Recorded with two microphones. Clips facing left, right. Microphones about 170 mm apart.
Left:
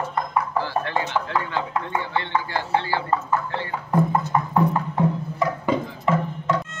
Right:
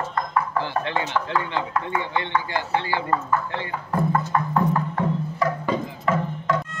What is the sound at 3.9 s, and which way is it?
Music, 15° left (ahead or behind).